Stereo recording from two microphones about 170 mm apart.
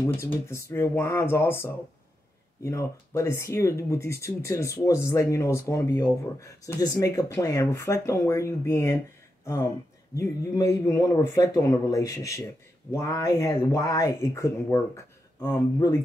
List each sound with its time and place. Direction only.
0.0 s speech: 15° left (ahead or behind)